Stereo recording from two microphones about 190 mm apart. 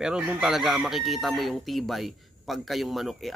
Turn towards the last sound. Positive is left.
turn(degrees=0)  # may be behind; listen again after turning